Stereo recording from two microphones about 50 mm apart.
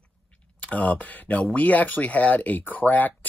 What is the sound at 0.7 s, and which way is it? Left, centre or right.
Speech, left.